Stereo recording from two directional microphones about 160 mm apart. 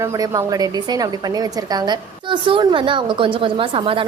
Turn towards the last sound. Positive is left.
turn(degrees=-35)  # may be behind; listen again after turning